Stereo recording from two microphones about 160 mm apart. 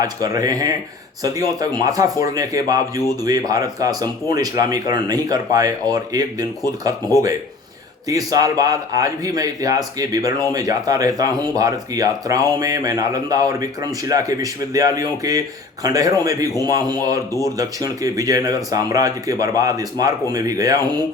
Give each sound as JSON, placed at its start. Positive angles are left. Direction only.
{"t": 0.0, "sound": "speech", "side_deg": -20}